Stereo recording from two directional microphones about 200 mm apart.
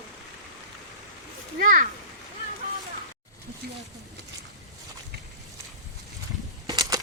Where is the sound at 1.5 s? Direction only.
40° right (ahead or behind).